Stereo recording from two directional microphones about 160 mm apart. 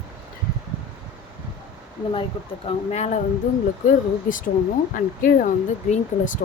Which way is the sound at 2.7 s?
45° left (ahead or behind).